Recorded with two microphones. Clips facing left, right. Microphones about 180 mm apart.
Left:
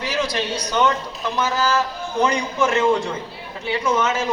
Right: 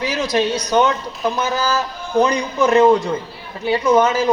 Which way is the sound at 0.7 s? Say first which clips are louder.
Right 1 dB; 40° right (ahead or behind).